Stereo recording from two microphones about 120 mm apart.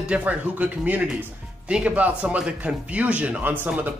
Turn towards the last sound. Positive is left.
turn(degrees=-10)  # may be behind; listen again after turning